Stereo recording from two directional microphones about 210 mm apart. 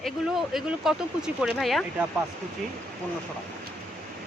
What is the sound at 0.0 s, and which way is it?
Speech, centre (ahead or behind).